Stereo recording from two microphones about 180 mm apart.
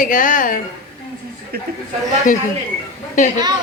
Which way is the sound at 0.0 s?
45° left (ahead or behind).